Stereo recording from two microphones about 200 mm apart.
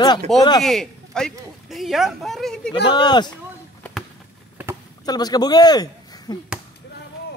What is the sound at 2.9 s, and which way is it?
Speech, 20° left (ahead or behind).